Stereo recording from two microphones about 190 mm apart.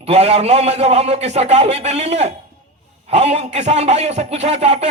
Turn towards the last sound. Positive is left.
turn(degrees=-35)  # may be behind; listen again after turning